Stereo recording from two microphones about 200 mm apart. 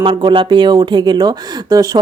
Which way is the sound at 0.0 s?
25° right (ahead or behind).